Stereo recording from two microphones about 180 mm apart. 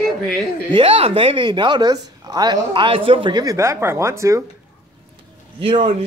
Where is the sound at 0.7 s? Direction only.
30° right (ahead or behind); by 4.4 s 15° right (ahead or behind).